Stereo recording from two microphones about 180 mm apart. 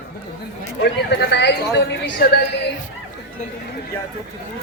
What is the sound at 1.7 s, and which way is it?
Speech, 70° left (ahead or behind).